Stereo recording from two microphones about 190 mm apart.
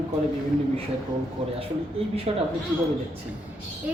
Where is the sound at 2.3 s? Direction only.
30° right (ahead or behind).